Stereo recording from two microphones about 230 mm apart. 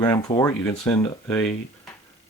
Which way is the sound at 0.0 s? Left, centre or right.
Centre.